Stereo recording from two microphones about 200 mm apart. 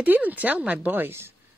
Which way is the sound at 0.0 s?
10° right (ahead or behind).